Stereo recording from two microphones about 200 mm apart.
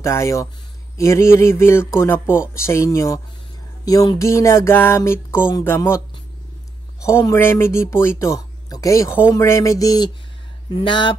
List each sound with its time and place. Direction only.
0.0 s speech: 15° left (ahead or behind)